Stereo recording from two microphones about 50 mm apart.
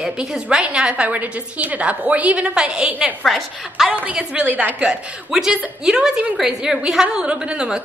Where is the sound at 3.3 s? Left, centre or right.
Centre.